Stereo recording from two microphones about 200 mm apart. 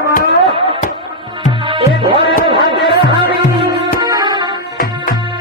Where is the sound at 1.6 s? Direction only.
25° right (ahead or behind).